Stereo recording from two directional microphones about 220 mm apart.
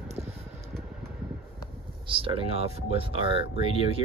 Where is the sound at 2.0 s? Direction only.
25° right (ahead or behind).